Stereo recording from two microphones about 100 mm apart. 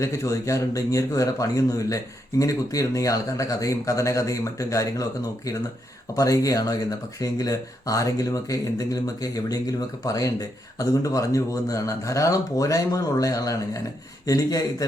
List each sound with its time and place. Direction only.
0.0 s speech: 30° left (ahead or behind)
6.1 s speech: 35° left (ahead or behind)